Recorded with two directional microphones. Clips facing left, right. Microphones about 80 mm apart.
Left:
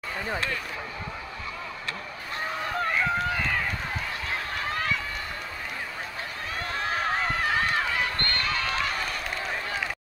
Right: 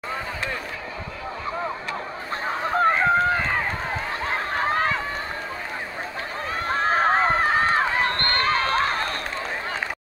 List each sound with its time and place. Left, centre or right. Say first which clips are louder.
2.4 s run: right 8 dB; right
6.6 s run: right 8 dB; right
8.2 s a sound: right 7 dB; right